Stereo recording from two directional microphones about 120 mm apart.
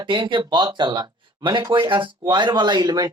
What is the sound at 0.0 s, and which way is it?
Speech, 40° right (ahead or behind).